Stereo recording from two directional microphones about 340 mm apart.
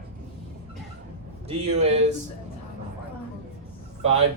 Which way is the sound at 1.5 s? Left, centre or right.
Centre.